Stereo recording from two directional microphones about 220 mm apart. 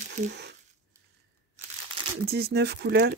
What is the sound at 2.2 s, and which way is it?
Speech, 45° right (ahead or behind).